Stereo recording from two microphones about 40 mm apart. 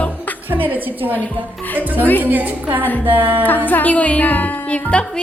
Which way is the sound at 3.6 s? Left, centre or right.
Left.